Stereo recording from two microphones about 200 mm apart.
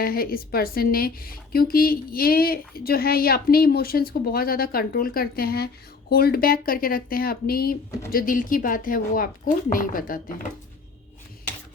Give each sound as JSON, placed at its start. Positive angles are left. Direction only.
{"t": 0.0, "sound": "a woman's voice", "side_deg": 50}